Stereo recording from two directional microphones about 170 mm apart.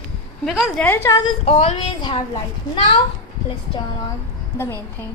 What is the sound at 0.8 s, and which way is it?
Speech, 15° left (ahead or behind).